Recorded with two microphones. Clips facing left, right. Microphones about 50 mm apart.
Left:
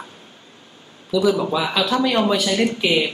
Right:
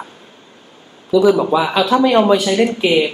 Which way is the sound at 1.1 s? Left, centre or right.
Right.